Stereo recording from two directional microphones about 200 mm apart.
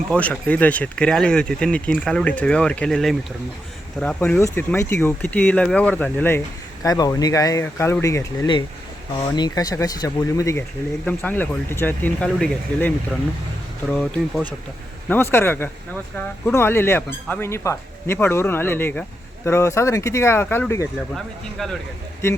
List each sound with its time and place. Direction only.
0.1 s speech: 5° left (ahead or behind)
13.9 s speech: 5° left (ahead or behind)